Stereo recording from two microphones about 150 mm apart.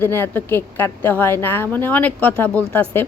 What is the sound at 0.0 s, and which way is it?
A woman's voice, 15° left (ahead or behind).